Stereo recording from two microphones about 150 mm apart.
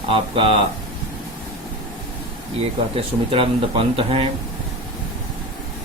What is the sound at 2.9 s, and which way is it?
Speech, 35° right (ahead or behind).